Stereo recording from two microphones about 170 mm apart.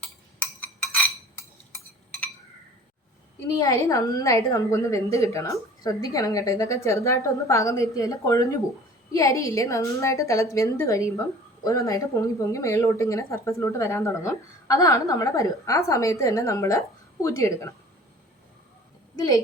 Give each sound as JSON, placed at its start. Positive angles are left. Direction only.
{"t": 3.5, "sound": "a woman's voice", "side_deg": 20}